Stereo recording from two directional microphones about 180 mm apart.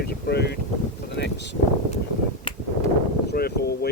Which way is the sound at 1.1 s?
70° left (ahead or behind).